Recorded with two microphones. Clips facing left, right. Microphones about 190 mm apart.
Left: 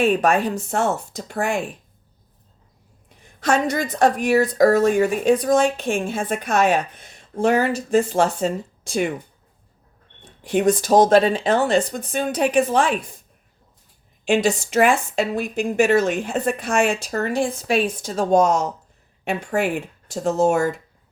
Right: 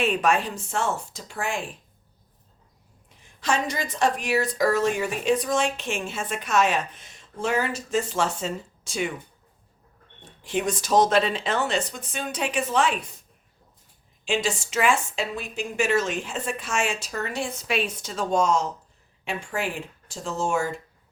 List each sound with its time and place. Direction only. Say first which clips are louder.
0.0 s speech: left 5 dB; 50° left (ahead or behind)
3.4 s speech: left 6 dB; 40° left (ahead or behind)
3.8 s speech: left 6 dB; 60° left (ahead or behind)
5.4 s speech: left 7 dB; 35° left (ahead or behind)
5.6 s speech: left 7 dB; 55° left (ahead or behind)
10.4 s speech: left 8 dB; 60° left (ahead or behind)
14.3 s speech: left 7 dB; 60° left (ahead or behind)